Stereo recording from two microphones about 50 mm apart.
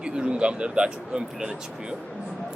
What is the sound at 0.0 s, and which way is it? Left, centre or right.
Speech, centre.